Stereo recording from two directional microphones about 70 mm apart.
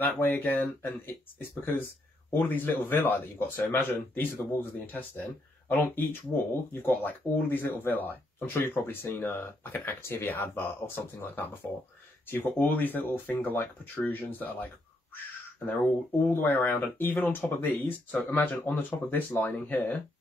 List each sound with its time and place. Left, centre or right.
0.0 s speech: left
15.6 s speech: left